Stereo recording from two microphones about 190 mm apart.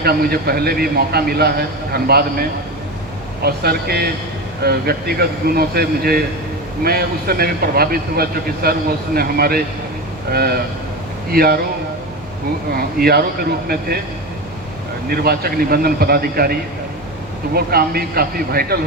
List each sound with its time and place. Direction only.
0.0 s a man's voice: 55° right (ahead or behind)
12.7 s speech: 55° right (ahead or behind)
15.1 s speech: 55° right (ahead or behind)